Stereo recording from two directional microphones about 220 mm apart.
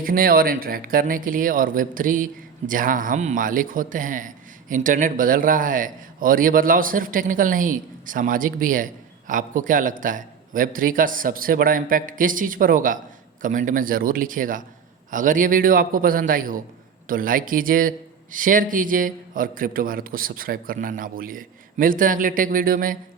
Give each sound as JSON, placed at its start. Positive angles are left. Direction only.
{"t": 0.0, "sound": "a man's voice", "side_deg": -40}